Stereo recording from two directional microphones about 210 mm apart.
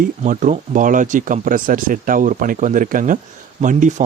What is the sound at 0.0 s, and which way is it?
A man's voice, 40° right (ahead or behind).